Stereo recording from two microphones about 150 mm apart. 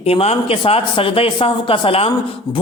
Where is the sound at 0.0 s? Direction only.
40° left (ahead or behind).